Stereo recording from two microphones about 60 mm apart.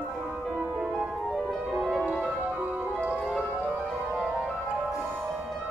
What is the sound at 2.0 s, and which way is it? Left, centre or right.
Music, centre.